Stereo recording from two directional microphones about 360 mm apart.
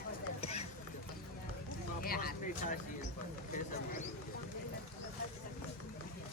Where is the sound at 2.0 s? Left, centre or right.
Left.